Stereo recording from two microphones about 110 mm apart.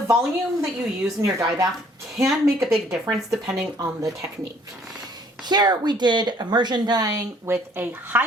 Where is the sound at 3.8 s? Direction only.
30° right (ahead or behind).